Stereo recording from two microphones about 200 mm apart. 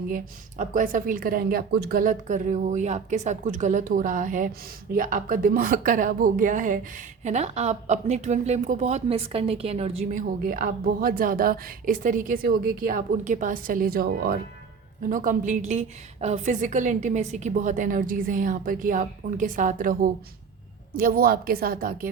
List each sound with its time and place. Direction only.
0.1 s a woman's voice: 40° right (ahead or behind)